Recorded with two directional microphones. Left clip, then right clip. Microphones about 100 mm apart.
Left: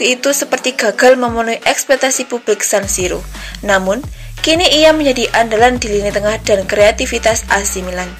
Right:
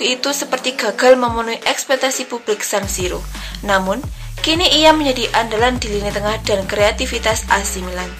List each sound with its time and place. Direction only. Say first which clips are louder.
0.0 s speech: left 5 dB; 30° left (ahead or behind)